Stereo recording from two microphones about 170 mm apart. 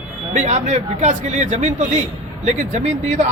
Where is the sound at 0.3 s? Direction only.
45° right (ahead or behind).